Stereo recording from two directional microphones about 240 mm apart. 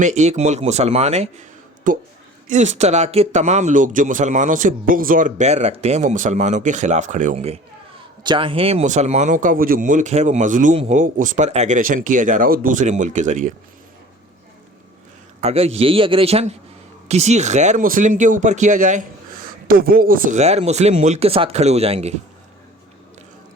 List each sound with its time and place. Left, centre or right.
0.0 s speech: right
15.4 s speech: right